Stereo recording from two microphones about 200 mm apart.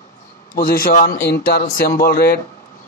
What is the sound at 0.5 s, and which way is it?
A man's voice, 45° left (ahead or behind).